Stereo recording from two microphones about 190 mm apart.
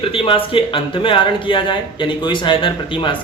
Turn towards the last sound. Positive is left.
turn(degrees=25)  # may be behind; listen again after turning